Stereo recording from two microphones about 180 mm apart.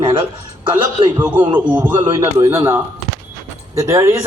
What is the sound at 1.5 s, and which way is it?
A man's voice, 10° right (ahead or behind).